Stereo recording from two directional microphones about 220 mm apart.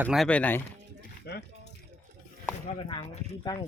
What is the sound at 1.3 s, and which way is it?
Speech, 45° left (ahead or behind).